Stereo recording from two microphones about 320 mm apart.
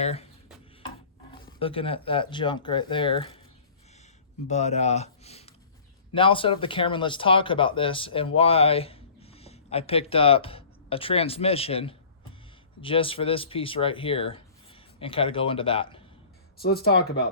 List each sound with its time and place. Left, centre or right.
0.0 s speech: centre
1.5 s speech: centre
4.4 s speech: left
16.6 s speech: left